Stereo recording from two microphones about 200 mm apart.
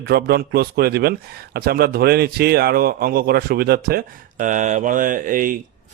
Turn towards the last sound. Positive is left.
turn(degrees=-45)  # may be behind; listen again after turning